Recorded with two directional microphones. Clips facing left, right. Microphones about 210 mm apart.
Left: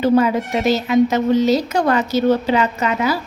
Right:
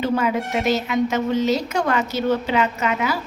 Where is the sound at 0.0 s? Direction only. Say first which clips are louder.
Left 6 dB; 35° left (ahead or behind).